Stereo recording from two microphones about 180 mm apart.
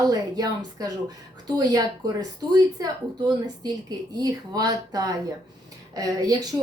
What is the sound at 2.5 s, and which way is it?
A woman's voice, 20° right (ahead or behind).